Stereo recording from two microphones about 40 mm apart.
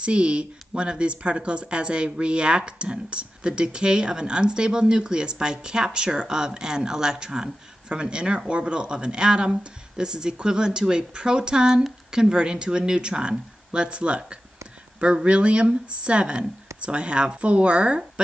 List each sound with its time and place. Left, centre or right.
0.0 s speech: right